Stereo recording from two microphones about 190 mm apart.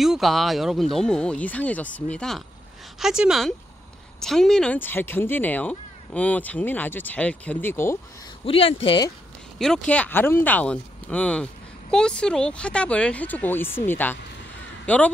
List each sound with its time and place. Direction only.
0.0 s speech: centre (ahead or behind)
8.5 s speech: 30° left (ahead or behind)
9.6 s speech: 5° left (ahead or behind)